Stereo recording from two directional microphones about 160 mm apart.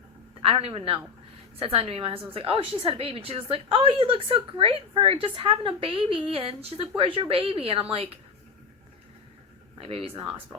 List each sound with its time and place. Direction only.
0.4 s a woman's voice: 35° right (ahead or behind)
9.7 s a woman's voice: 35° right (ahead or behind)